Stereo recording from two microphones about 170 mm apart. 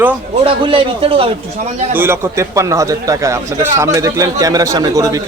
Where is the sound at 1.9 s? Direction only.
15° right (ahead or behind).